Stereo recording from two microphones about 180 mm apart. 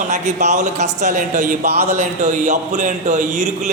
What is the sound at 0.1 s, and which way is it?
Speech, 40° right (ahead or behind).